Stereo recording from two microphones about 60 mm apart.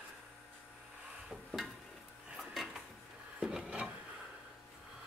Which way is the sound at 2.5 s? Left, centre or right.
Centre.